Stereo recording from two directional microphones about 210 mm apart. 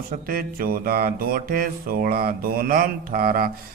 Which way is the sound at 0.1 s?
45° right (ahead or behind).